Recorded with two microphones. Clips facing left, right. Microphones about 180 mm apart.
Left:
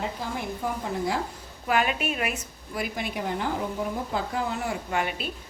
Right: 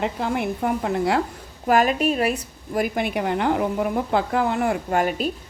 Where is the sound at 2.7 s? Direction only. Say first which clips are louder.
Right 8 dB; 55° right (ahead or behind).